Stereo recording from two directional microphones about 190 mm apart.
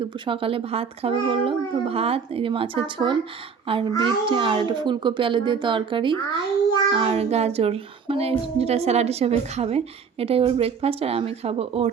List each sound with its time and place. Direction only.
0.0 s a child's voice: 30° right (ahead or behind)